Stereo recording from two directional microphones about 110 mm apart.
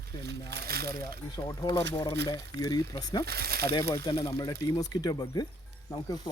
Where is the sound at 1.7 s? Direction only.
35° left (ahead or behind).